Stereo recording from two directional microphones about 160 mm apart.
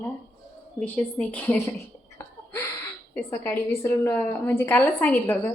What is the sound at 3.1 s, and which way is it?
A woman's voice, 15° left (ahead or behind).